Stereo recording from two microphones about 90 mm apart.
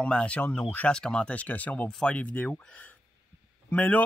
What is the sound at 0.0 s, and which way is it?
Speech, 10° left (ahead or behind).